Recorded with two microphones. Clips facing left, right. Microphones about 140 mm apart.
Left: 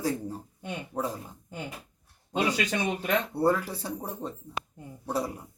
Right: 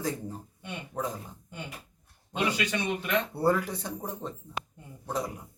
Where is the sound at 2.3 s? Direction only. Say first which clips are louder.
Left 2 dB; 45° left (ahead or behind).